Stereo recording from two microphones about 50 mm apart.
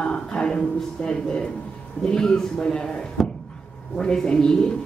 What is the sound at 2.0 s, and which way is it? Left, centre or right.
Speech, centre.